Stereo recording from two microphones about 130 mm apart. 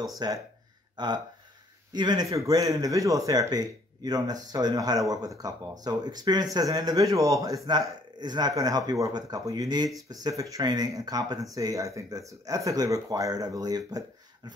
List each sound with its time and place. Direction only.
0.2 s speech: 35° right (ahead or behind)